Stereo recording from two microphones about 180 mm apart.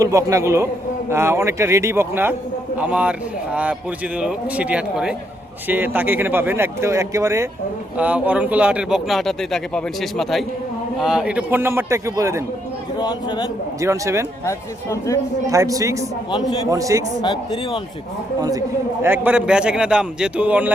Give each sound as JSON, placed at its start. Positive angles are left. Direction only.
{"t": 0.0, "sound": "a man's voice", "side_deg": -15}
{"t": 13.0, "sound": "a man's voice", "side_deg": 25}
{"t": 13.8, "sound": "speech", "side_deg": -15}
{"t": 14.4, "sound": "speech", "side_deg": 15}
{"t": 15.4, "sound": "speech", "side_deg": -20}
{"t": 16.3, "sound": "a man's voice", "side_deg": 30}
{"t": 16.6, "sound": "a man's voice", "side_deg": -20}
{"t": 17.2, "sound": "a man's voice", "side_deg": 30}
{"t": 19.0, "sound": "speech", "side_deg": -10}